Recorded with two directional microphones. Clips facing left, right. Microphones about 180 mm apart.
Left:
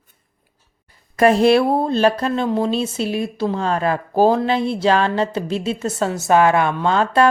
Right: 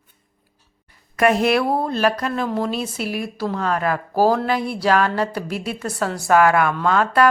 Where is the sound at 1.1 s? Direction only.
30° left (ahead or behind).